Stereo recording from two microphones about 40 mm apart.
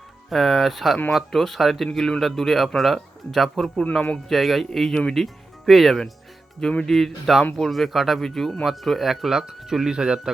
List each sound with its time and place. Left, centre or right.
0.3 s a man's voice: centre
1.9 s a man's voice: centre
4.9 s speech: centre
5.2 s a man's voice: centre
9.3 s speech: centre